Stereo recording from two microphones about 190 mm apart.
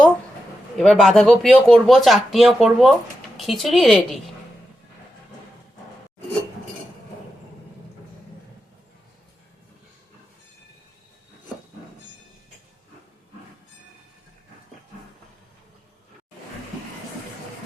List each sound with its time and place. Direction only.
0.8 s speech: centre (ahead or behind)